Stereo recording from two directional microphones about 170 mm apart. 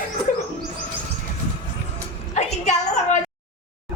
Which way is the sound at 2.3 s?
40° left (ahead or behind).